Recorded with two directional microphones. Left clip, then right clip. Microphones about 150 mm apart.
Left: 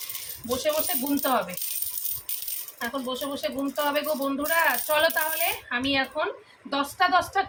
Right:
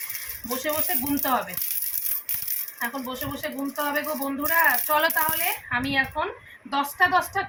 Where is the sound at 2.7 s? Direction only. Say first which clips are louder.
Even; 25° left (ahead or behind).